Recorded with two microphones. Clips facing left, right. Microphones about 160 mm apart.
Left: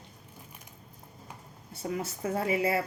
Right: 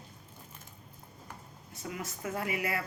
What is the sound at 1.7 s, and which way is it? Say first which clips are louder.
A woman's voice: left 6 dB; 30° left (ahead or behind).